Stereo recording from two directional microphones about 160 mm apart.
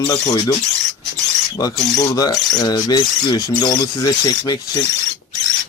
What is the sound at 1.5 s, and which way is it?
Speech, 20° left (ahead or behind).